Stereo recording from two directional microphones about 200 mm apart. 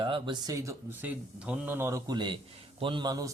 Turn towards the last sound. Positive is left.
turn(degrees=-20)  # may be behind; listen again after turning